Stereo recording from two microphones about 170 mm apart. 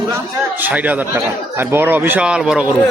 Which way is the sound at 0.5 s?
10° right (ahead or behind).